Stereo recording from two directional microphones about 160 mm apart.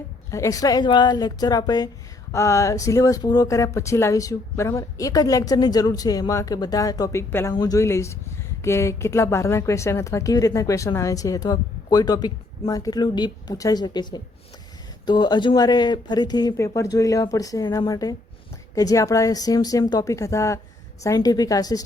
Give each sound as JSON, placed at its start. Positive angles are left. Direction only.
{"t": 0.3, "sound": "speech", "side_deg": 20}